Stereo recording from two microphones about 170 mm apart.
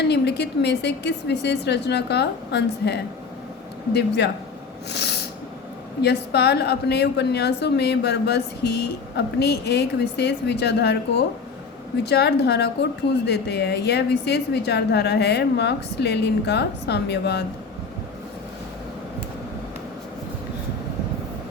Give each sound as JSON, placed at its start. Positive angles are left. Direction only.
{"t": 0.1, "sound": "a woman's voice", "side_deg": 80}
{"t": 4.9, "sound": "snort", "side_deg": 75}
{"t": 6.0, "sound": "a woman's voice", "side_deg": 75}